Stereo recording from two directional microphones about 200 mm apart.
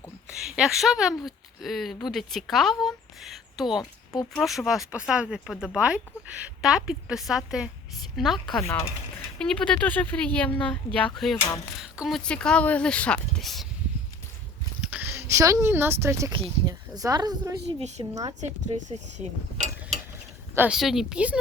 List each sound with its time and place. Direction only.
0.3 s speech: 5° right (ahead or behind)
14.8 s a sound: 5° right (ahead or behind)
16.6 s speech: 15° right (ahead or behind)
18.3 s speech: 35° right (ahead or behind)
20.6 s speech: 5° right (ahead or behind)